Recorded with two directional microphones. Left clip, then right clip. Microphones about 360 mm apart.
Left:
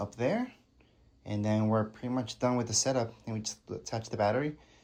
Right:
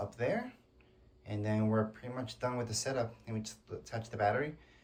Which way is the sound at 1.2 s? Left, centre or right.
Centre.